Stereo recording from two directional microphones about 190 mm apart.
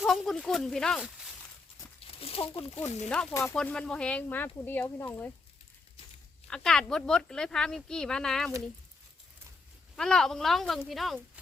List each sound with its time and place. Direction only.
0.0 s speech: centre (ahead or behind)
2.0 s speech: 30° left (ahead or behind)
3.4 s speech: 5° left (ahead or behind)
6.5 s speech: 5° left (ahead or behind)
9.9 s speech: 5° left (ahead or behind)